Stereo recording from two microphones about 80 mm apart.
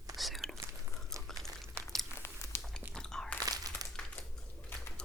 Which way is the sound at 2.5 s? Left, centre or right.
Left.